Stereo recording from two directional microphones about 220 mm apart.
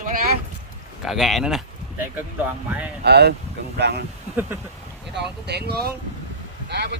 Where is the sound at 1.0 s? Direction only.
Centre (ahead or behind).